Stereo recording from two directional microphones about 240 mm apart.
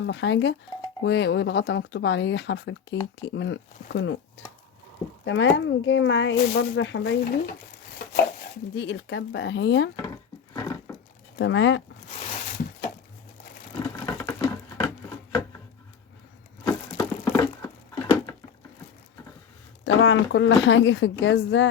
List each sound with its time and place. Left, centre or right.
0.0 s speech: left
8.7 s speech: left
10.5 s a sound: centre
11.3 s speech: left
14.0 s patter: centre
16.6 s a sound: centre
19.8 s speech: left